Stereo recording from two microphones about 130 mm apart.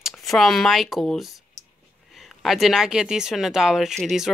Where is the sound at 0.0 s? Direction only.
Centre (ahead or behind).